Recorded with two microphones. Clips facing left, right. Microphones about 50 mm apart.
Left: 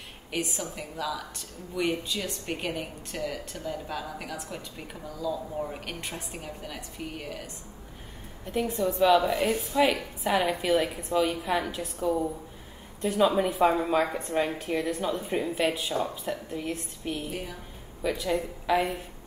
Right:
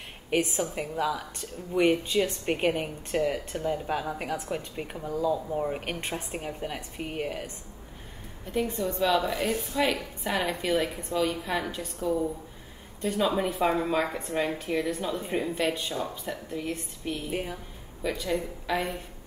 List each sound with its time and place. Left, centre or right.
0.3 s a woman's voice: right
8.5 s a woman's voice: centre
17.3 s a woman's voice: right
18.0 s a woman's voice: centre